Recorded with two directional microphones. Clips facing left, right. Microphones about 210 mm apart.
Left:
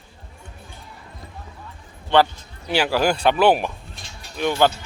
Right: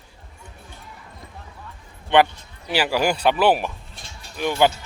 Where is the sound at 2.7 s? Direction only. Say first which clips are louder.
Left 1 dB; 10° right (ahead or behind).